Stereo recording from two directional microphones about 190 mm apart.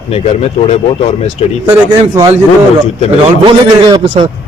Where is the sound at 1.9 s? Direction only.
20° right (ahead or behind).